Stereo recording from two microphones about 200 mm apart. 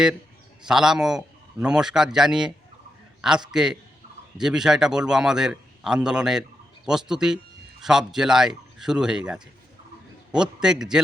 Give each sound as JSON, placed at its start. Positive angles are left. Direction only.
{"t": 0.6, "sound": "a man's voice", "side_deg": -5}